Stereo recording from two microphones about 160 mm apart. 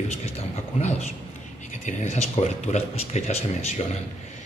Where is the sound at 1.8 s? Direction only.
40° left (ahead or behind).